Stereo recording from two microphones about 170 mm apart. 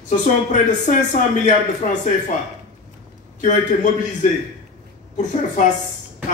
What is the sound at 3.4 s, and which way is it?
Speech, 45° left (ahead or behind).